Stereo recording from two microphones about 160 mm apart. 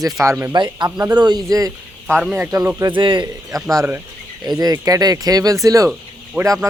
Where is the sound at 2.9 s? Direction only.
30° right (ahead or behind).